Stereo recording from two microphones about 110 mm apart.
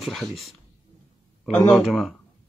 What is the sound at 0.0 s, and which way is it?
Speech, centre (ahead or behind).